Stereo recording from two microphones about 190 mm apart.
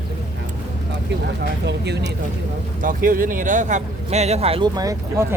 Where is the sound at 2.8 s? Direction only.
45° right (ahead or behind).